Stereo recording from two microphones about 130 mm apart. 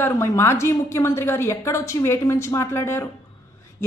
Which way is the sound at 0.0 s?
20° left (ahead or behind).